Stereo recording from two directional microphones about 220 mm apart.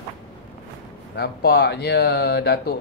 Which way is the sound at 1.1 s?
45° left (ahead or behind).